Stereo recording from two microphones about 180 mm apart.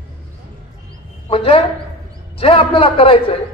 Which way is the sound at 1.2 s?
30° left (ahead or behind).